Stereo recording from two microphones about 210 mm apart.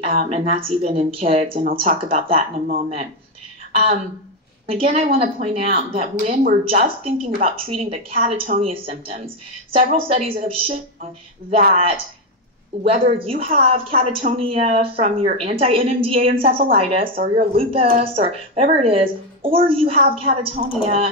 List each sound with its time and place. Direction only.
0.0 s speech: 30° right (ahead or behind)
3.7 s speech: 30° right (ahead or behind)
17.1 s speech: 45° right (ahead or behind)
18.2 s speech: 30° right (ahead or behind)